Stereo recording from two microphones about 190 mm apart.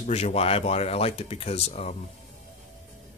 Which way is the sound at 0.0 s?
35° left (ahead or behind).